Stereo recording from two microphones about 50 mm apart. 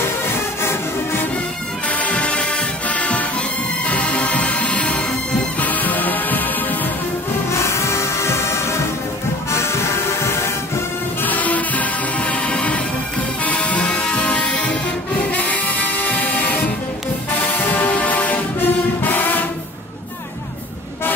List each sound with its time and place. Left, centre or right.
0.3 s music: left
1.9 s music: left
7.5 s music: left
11.2 s music: left
17.3 s brass instrument: left